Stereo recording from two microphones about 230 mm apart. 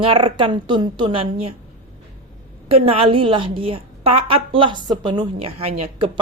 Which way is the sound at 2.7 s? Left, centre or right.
Right.